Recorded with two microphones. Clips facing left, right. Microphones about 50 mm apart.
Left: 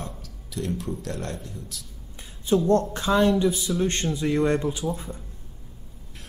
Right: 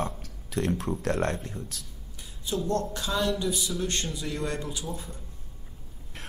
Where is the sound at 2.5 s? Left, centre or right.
Left.